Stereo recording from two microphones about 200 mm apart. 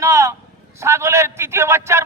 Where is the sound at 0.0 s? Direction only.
15° right (ahead or behind).